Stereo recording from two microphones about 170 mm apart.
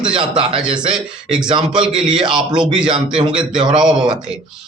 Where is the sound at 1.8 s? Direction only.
5° right (ahead or behind).